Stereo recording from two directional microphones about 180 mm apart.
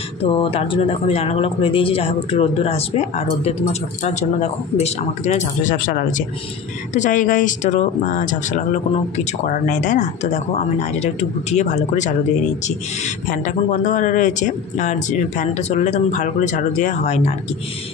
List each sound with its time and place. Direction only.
0.2 s speech: 30° left (ahead or behind)